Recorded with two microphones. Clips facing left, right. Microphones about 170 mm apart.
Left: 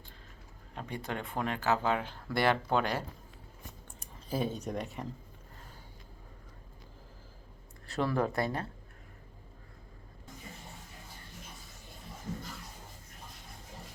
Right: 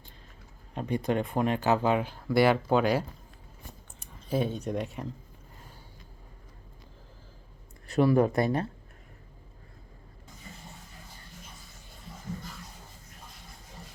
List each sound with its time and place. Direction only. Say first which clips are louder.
0.8 s speech: right 10 dB; 20° right (ahead or behind)
4.0 s a sound: right 4 dB; centre (ahead or behind)
4.6 s speech: right 4 dB; centre (ahead or behind)
7.9 s speech: right 8 dB; 15° right (ahead or behind)